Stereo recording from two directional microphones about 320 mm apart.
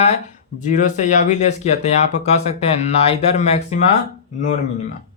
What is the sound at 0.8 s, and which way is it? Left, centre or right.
Speech, left.